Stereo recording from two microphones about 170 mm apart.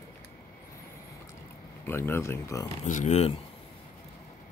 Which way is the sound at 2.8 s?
45° left (ahead or behind).